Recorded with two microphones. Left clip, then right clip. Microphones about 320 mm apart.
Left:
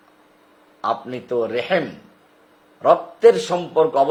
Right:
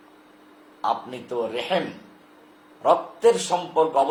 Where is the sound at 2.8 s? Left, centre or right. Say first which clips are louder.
Left 5 dB; left.